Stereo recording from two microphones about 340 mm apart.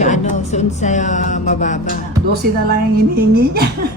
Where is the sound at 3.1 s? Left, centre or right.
Right.